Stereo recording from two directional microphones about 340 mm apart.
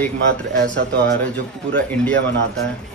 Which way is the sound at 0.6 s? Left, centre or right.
Right.